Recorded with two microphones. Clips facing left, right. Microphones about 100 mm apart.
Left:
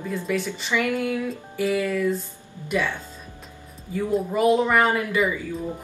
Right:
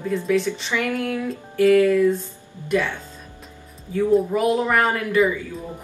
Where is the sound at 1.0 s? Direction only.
5° left (ahead or behind).